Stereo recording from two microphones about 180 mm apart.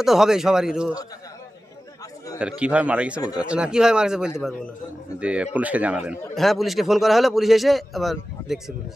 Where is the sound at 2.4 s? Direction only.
5° right (ahead or behind).